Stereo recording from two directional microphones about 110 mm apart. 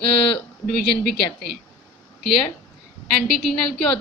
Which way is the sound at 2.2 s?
5° left (ahead or behind).